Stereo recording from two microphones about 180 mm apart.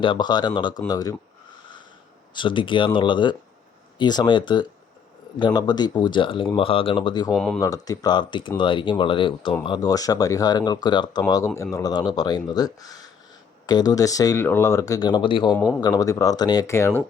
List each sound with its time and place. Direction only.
0.0 s speech: 25° left (ahead or behind)
2.3 s speech: 25° left (ahead or behind)
7.3 s speech: centre (ahead or behind)
7.6 s speech: 20° left (ahead or behind)